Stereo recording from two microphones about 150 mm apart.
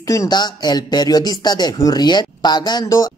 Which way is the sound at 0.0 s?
20° left (ahead or behind).